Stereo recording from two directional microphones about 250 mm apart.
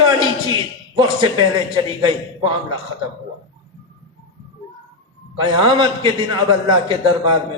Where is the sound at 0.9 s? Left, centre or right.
Centre.